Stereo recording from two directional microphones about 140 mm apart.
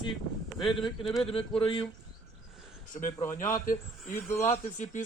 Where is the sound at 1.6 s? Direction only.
40° left (ahead or behind).